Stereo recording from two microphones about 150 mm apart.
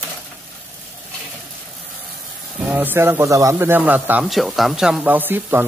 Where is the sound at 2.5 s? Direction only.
10° right (ahead or behind).